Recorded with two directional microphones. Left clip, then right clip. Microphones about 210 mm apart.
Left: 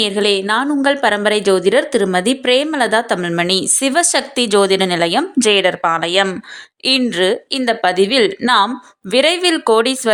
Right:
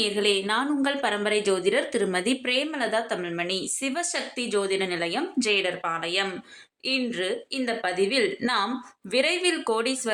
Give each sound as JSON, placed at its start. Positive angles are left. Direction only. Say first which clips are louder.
{"t": 0.0, "sound": "a woman's voice", "louder": "left 9 dB", "side_deg": 40}